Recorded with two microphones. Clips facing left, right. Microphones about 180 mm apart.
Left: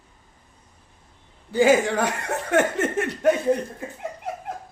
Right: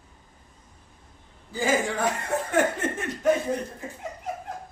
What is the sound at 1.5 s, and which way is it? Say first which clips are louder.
Speech: left 7 dB; 75° left (ahead or behind).